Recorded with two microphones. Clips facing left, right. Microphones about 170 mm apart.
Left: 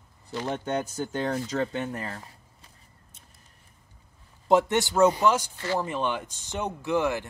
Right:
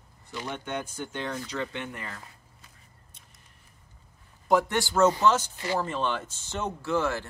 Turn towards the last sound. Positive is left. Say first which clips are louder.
# left 2 dB
turn(degrees=15)  # may be behind; listen again after turning